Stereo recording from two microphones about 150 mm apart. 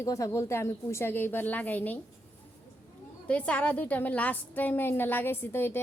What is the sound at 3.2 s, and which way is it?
A woman's voice, 10° left (ahead or behind).